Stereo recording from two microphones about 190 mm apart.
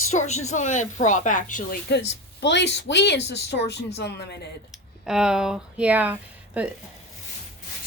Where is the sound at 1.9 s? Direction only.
65° left (ahead or behind).